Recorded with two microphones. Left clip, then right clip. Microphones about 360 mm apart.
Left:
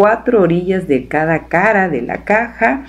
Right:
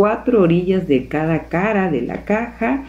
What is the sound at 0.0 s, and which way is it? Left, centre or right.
Speech, centre.